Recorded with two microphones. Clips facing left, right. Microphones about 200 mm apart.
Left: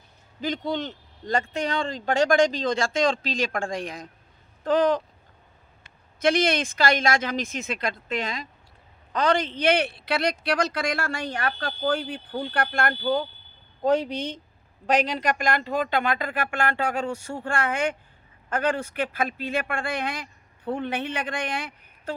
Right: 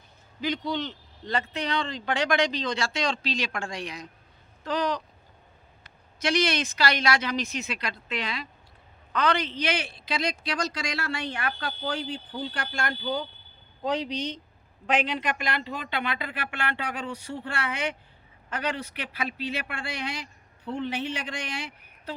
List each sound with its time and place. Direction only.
0.4 s speech: 50° left (ahead or behind)
6.2 s speech: 50° left (ahead or behind)
14.8 s speech: 40° left (ahead or behind)